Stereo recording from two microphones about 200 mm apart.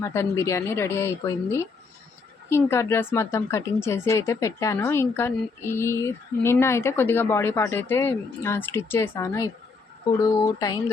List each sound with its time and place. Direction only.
0.0 s speech: 15° left (ahead or behind)